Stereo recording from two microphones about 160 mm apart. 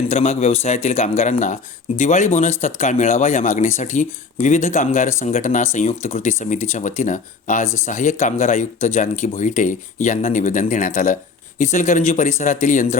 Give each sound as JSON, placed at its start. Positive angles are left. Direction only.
{"t": 0.1, "sound": "speech", "side_deg": 40}